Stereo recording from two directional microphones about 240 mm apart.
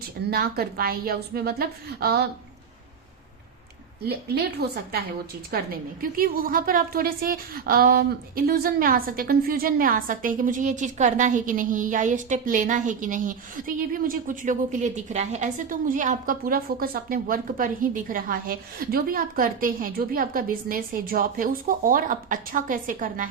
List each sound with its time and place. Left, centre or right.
0.3 s a woman's voice: right
4.0 s a woman's voice: right